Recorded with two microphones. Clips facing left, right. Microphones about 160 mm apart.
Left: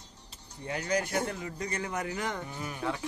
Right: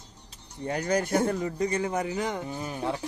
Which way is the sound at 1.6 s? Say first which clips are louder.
Right 6 dB; 25° right (ahead or behind).